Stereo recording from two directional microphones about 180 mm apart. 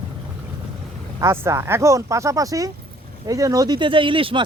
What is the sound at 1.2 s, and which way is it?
Speech, 15° right (ahead or behind).